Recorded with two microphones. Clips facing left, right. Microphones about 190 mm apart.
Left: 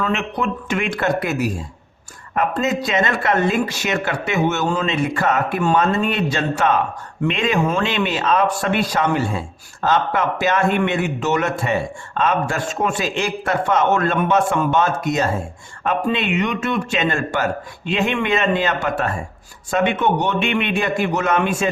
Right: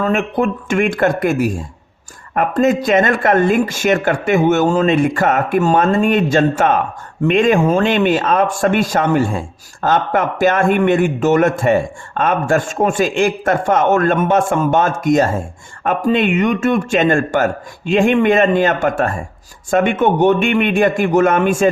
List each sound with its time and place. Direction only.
0.0 s a man's voice: 50° right (ahead or behind)